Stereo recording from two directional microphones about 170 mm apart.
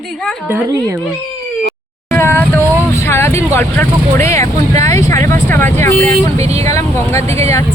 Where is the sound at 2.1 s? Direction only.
15° left (ahead or behind).